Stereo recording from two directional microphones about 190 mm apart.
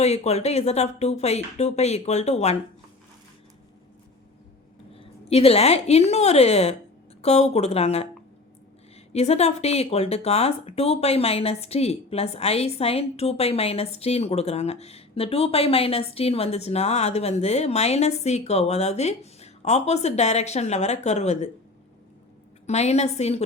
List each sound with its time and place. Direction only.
0.0 s speech: 35° left (ahead or behind)
4.9 s a woman's voice: 30° left (ahead or behind)
9.1 s speech: 35° left (ahead or behind)
22.6 s speech: 35° left (ahead or behind)